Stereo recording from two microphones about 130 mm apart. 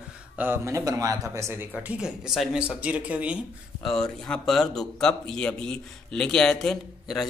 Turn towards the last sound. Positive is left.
turn(degrees=0)  # may be behind; listen again after turning